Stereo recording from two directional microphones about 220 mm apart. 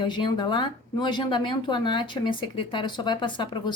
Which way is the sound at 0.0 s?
20° left (ahead or behind).